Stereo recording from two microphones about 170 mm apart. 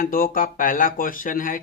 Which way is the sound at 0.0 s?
55° left (ahead or behind).